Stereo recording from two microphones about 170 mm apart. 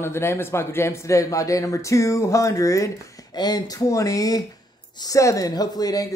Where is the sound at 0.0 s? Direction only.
15° left (ahead or behind).